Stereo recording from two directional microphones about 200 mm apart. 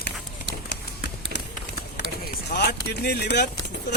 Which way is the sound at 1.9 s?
55° left (ahead or behind).